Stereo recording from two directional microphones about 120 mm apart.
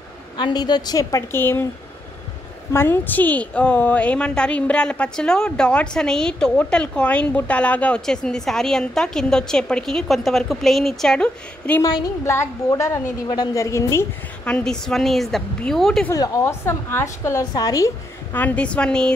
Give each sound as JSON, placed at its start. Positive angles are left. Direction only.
{"t": 0.4, "sound": "a woman's voice", "side_deg": 35}
{"t": 2.7, "sound": "a woman's voice", "side_deg": 20}
{"t": 11.8, "sound": "a woman's voice", "side_deg": 30}
{"t": 14.4, "sound": "a woman's voice", "side_deg": 10}
{"t": 16.1, "sound": "a woman's voice", "side_deg": 25}
{"t": 18.3, "sound": "a woman's voice", "side_deg": 15}